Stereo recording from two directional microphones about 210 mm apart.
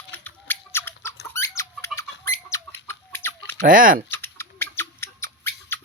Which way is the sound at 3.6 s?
40° right (ahead or behind).